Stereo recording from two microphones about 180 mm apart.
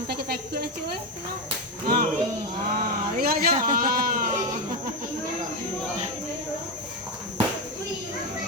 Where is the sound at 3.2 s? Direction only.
55° right (ahead or behind).